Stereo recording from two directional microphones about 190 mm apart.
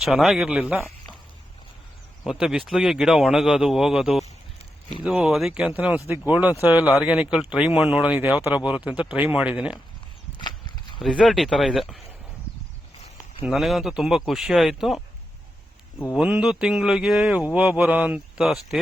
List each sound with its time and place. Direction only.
0.0 s speech: centre (ahead or behind)
2.2 s speech: centre (ahead or behind)
10.4 s a sound: 25° left (ahead or behind)
11.0 s speech: centre (ahead or behind)
13.4 s speech: centre (ahead or behind)
16.1 s speech: 5° right (ahead or behind)